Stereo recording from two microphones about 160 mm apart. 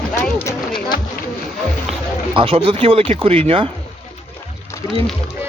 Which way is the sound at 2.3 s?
35° right (ahead or behind).